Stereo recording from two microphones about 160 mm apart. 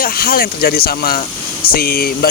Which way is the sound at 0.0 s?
65° left (ahead or behind).